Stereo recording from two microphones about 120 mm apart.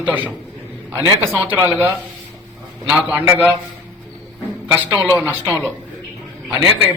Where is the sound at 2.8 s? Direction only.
10° right (ahead or behind).